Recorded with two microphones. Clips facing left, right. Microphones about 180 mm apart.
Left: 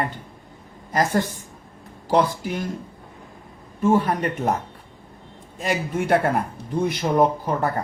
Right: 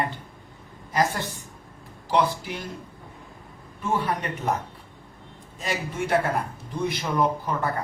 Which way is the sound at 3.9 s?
45° left (ahead or behind).